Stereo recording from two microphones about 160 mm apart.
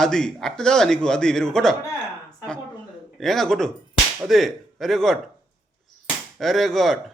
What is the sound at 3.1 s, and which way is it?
A man's voice, centre (ahead or behind).